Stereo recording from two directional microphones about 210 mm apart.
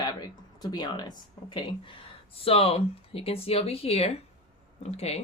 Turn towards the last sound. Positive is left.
turn(degrees=30)  # may be behind; listen again after turning